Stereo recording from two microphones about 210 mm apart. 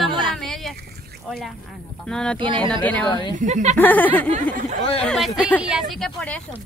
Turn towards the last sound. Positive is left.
turn(degrees=-5)  # may be behind; listen again after turning